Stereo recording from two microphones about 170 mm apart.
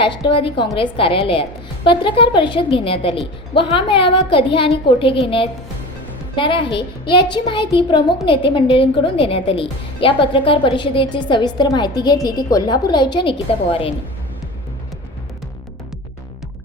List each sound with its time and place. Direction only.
0.3 s a woman's voice: 30° left (ahead or behind)